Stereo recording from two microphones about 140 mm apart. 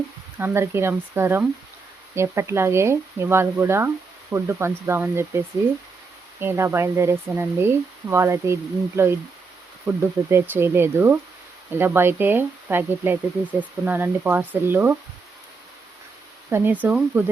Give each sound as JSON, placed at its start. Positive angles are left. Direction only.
{"t": 0.3, "sound": "speech", "side_deg": -15}
{"t": 6.4, "sound": "speech", "side_deg": -15}
{"t": 16.5, "sound": "speech", "side_deg": -15}